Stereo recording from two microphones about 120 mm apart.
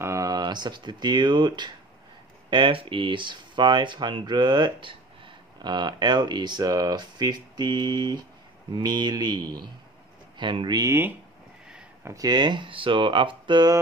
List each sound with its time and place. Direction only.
0.0 s speech: 25° right (ahead or behind); by 10.8 s 40° right (ahead or behind)
10.8 s speech: 20° right (ahead or behind); by 13.7 s 40° right (ahead or behind)